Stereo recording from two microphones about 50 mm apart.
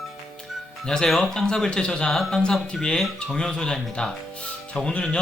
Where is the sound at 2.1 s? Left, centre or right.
Centre.